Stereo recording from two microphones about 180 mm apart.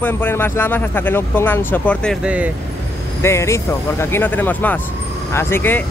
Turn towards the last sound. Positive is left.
turn(degrees=10)  # may be behind; listen again after turning